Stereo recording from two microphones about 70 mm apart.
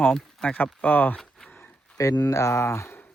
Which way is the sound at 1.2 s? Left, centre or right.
Centre.